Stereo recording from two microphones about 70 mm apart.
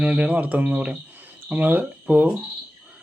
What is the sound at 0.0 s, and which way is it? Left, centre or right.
Speech, centre.